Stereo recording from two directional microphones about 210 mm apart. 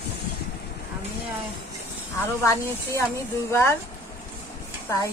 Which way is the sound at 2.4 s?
10° left (ahead or behind).